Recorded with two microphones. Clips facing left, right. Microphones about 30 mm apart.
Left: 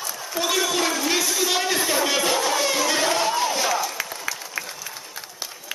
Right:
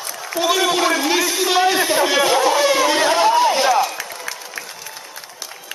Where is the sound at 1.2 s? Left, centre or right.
Right.